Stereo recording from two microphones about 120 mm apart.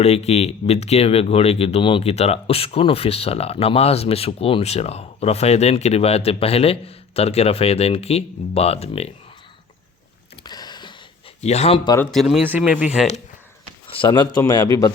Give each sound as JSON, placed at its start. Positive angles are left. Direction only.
{"t": 0.0, "sound": "speech", "side_deg": 60}
{"t": 10.4, "sound": "a sound", "side_deg": 35}
{"t": 11.3, "sound": "speech", "side_deg": 65}
{"t": 12.1, "sound": "speech", "side_deg": 0}
{"t": 12.4, "sound": "speech", "side_deg": -15}
{"t": 13.0, "sound": "speech", "side_deg": -5}
{"t": 14.1, "sound": "a man's voice", "side_deg": 35}